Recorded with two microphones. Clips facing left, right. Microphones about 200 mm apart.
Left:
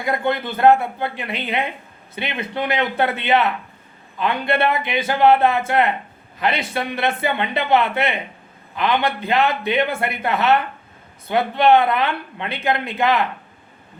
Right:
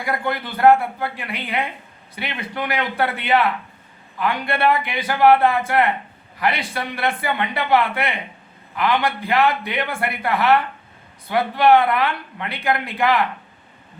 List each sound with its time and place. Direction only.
0.0 s speech: 25° left (ahead or behind)